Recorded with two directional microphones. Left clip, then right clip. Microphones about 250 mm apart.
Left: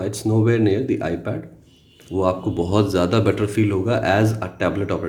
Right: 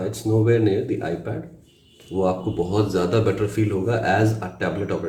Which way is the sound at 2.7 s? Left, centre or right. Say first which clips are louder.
Left 2 dB; left.